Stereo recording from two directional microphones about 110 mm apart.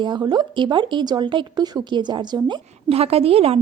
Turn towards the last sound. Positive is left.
turn(degrees=-60)  # may be behind; listen again after turning